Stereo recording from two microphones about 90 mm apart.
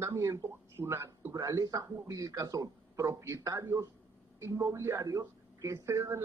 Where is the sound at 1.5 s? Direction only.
45° right (ahead or behind).